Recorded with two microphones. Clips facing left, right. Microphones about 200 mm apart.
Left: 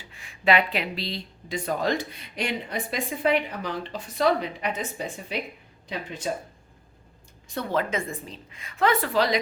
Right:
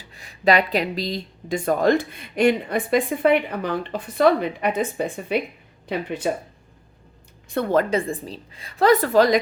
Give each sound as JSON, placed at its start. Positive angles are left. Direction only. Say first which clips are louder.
{"t": 0.0, "sound": "speech", "louder": "right 5 dB", "side_deg": -40}
{"t": 7.5, "sound": "speech", "louder": "right 7 dB", "side_deg": -55}
{"t": 7.9, "sound": "a woman's voice", "louder": "right 7 dB", "side_deg": -35}